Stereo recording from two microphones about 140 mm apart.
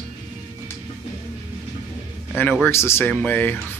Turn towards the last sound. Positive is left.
turn(degrees=15)  # may be behind; listen again after turning